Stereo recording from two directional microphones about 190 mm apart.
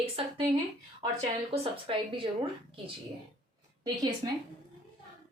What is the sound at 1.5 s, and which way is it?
Speech, 30° right (ahead or behind).